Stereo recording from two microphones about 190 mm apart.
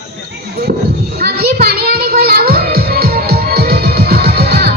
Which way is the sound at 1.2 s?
55° right (ahead or behind).